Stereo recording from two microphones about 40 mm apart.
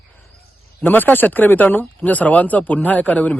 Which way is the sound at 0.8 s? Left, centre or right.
Left.